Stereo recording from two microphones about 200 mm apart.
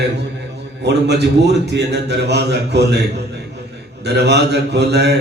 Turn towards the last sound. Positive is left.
turn(degrees=-55)  # may be behind; listen again after turning